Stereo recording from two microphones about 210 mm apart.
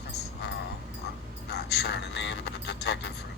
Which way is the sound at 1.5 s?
50° left (ahead or behind).